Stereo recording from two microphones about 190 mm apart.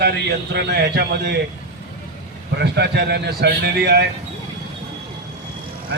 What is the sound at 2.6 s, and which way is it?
A man's voice, 60° right (ahead or behind).